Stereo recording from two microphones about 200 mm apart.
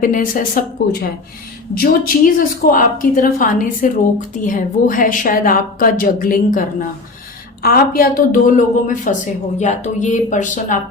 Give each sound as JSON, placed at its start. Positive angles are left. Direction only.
{"t": 0.0, "sound": "a woman's voice", "side_deg": 45}